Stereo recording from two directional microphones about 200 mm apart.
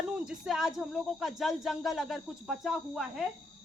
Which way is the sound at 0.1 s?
5° right (ahead or behind).